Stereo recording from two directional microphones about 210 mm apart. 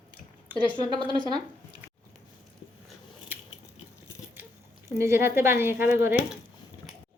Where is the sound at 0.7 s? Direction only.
20° right (ahead or behind).